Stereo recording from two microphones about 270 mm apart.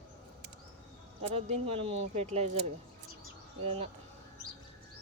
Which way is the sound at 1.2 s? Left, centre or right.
Right.